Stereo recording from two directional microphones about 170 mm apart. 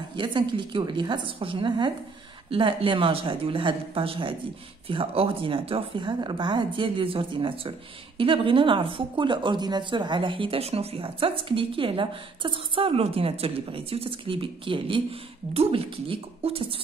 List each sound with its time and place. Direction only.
0.1 s a woman's voice: 25° right (ahead or behind)